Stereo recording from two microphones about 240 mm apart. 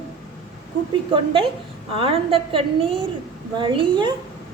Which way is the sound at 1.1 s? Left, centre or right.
Right.